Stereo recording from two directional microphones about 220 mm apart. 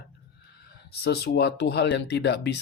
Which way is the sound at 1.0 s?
45° left (ahead or behind).